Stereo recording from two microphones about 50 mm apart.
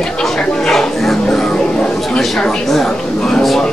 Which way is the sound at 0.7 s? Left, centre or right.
Centre.